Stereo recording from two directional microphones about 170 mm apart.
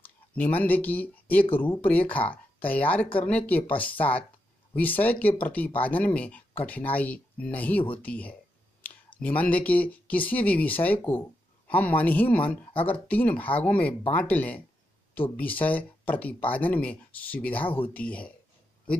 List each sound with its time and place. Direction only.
0.4 s speech: 10° left (ahead or behind)
12.7 s speech: 30° left (ahead or behind)
13.1 s speech: 10° left (ahead or behind)
17.6 s speech: 30° left (ahead or behind)
17.9 s speech: 10° left (ahead or behind)